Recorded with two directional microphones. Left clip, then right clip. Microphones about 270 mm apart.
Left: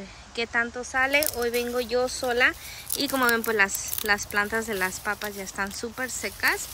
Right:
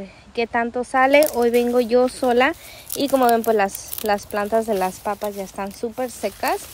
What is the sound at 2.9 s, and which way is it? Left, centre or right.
Speech, centre.